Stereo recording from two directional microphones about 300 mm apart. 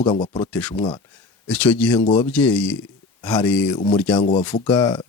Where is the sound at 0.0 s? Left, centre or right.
Centre.